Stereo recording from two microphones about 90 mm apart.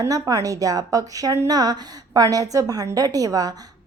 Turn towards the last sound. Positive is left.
turn(degrees=-45)  # may be behind; listen again after turning